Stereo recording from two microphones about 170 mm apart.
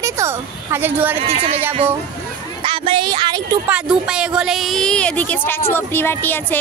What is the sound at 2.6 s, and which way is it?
Speech, 30° right (ahead or behind).